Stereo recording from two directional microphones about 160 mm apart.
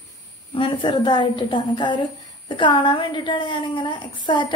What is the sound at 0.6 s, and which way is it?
A woman's voice, 30° left (ahead or behind).